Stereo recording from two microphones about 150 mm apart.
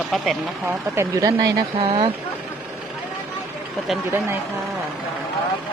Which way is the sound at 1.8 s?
40° right (ahead or behind).